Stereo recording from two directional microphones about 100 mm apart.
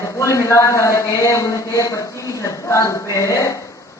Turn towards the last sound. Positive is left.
turn(degrees=30)  # may be behind; listen again after turning